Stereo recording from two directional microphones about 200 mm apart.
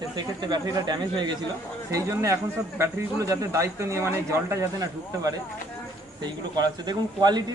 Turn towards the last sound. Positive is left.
turn(degrees=-20)  # may be behind; listen again after turning